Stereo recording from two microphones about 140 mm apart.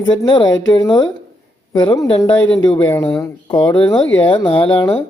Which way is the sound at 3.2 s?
25° left (ahead or behind).